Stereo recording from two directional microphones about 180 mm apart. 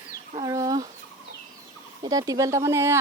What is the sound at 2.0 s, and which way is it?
Speech, 20° right (ahead or behind).